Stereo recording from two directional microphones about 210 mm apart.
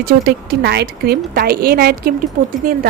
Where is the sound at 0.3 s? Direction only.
50° right (ahead or behind).